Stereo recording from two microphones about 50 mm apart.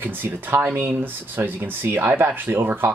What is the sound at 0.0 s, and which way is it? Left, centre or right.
Speech, right.